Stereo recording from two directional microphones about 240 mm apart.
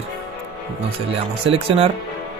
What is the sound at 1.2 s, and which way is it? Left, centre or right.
Speech, right.